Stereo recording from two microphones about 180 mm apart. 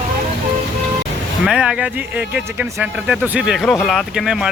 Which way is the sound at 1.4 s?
5° right (ahead or behind).